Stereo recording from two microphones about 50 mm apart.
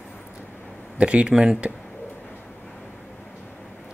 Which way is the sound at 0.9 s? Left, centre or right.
Right.